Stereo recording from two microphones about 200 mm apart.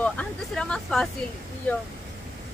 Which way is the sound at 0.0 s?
5° left (ahead or behind).